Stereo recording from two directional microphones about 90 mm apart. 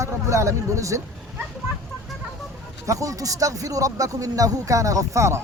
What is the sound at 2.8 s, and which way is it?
Speech, 40° right (ahead or behind).